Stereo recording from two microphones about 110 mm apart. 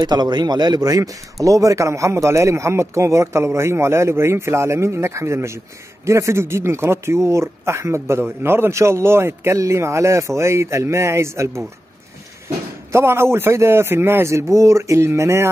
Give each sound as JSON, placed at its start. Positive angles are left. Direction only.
{"t": 0.0, "sound": "a man's voice", "side_deg": -40}
{"t": 12.9, "sound": "a man's voice", "side_deg": -25}